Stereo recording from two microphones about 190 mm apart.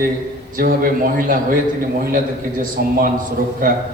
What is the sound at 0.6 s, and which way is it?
A man's voice, 50° right (ahead or behind).